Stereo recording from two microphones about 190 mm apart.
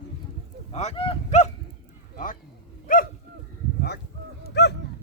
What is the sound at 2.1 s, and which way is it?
Speech, 45° left (ahead or behind).